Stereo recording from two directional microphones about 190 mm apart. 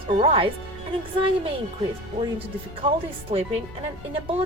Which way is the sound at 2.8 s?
30° right (ahead or behind).